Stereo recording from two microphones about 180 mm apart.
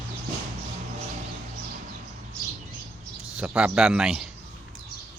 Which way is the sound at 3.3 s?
5° right (ahead or behind).